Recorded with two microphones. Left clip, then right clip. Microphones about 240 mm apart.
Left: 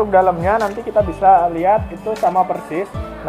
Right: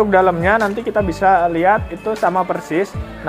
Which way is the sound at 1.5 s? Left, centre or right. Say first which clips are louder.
Right 1 dB; right.